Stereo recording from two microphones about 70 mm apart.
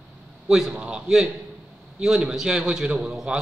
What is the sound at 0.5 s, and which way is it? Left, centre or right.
A man's voice, centre.